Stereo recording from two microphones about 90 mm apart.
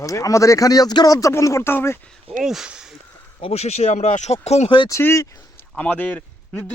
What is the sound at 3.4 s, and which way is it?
Speech, 90° left.